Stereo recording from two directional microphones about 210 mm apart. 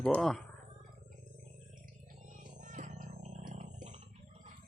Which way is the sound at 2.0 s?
35° right (ahead or behind).